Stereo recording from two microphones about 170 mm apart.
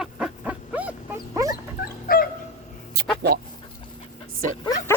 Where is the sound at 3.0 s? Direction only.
70° right (ahead or behind).